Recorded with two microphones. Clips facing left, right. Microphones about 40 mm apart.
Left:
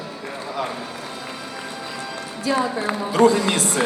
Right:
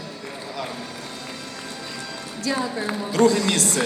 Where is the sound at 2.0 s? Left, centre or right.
Centre.